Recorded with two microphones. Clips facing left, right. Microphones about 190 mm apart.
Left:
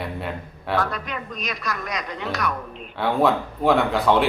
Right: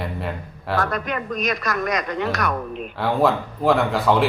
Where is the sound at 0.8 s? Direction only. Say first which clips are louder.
Right 4 dB; 50° right (ahead or behind).